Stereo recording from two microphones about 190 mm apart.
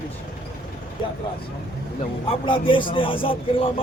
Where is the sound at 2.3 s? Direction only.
25° left (ahead or behind).